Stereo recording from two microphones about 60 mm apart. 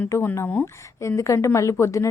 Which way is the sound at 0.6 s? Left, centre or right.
Left.